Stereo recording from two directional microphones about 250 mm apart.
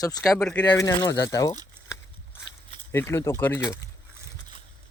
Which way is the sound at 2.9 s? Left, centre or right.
Centre.